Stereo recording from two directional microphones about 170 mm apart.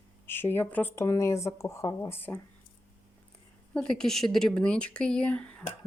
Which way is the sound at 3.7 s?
5° left (ahead or behind).